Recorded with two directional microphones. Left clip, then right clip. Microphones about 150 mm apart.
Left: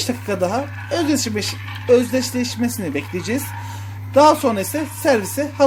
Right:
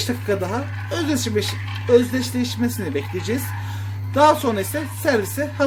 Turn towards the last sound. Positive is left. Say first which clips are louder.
# left 2 dB
turn(degrees=30)  # may be behind; listen again after turning